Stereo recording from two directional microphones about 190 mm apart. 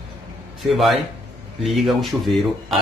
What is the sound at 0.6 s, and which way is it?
A man's voice, centre (ahead or behind).